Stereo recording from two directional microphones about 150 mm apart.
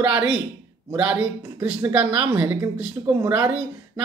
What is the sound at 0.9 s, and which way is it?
Speech, 10° right (ahead or behind).